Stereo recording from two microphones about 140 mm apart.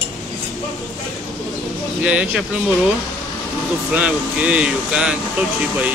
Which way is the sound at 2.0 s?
10° right (ahead or behind).